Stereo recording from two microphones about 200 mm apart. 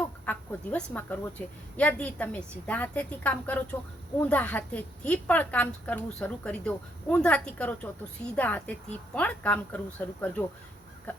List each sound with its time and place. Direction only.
0.0 s a woman's voice: 5° left (ahead or behind)